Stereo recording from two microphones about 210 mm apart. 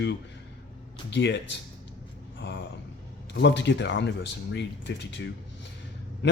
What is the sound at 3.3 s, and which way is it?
Speech, 55° left (ahead or behind).